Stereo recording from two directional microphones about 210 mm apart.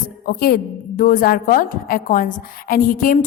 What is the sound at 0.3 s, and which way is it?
A woman's voice, 45° left (ahead or behind).